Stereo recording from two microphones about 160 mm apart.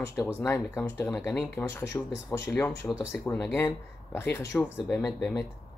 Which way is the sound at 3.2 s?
15° left (ahead or behind).